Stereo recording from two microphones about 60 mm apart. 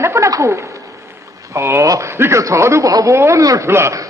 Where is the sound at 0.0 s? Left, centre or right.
Right.